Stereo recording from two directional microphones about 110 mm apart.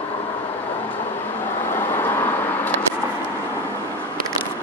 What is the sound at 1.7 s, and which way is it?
Vehicle, 20° left (ahead or behind).